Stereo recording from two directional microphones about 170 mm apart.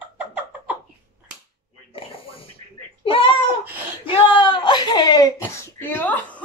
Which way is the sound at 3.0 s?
30° left (ahead or behind).